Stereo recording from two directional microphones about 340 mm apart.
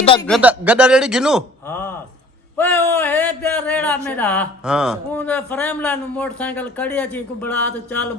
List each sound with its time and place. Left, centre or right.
0.0 s a man's voice: centre
0.3 s a man's voice: centre